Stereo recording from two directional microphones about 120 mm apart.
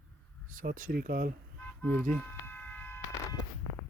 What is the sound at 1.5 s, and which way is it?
Music, 15° left (ahead or behind).